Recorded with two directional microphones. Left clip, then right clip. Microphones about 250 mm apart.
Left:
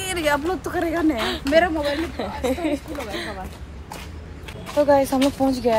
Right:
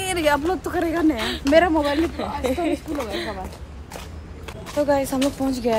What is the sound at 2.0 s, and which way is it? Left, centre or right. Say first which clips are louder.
A woman's voice: right 3 dB; centre.